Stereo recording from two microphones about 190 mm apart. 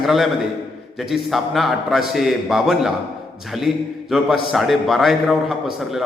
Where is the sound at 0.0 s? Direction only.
Centre (ahead or behind).